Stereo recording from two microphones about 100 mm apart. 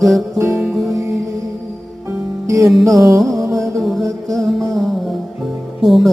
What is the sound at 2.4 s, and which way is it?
Music, 35° right (ahead or behind).